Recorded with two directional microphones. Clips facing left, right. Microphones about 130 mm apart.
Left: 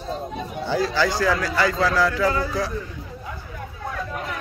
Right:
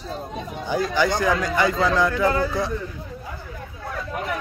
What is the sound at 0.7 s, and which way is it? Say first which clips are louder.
A man's voice: right 1 dB; 15° right (ahead or behind).